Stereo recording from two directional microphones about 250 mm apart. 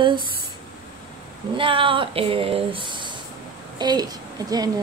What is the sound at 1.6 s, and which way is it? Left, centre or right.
Speech, right.